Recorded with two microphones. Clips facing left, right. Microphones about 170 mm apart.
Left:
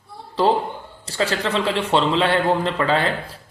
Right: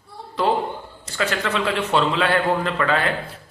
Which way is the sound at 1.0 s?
30° left (ahead or behind).